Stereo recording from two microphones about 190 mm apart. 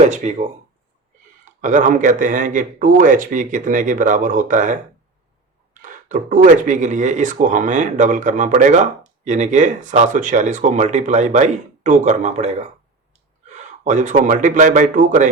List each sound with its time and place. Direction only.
0.1 s speech: 40° right (ahead or behind)
1.6 s speech: 45° right (ahead or behind)
6.1 s speech: 45° right (ahead or behind)
13.8 s speech: 40° right (ahead or behind)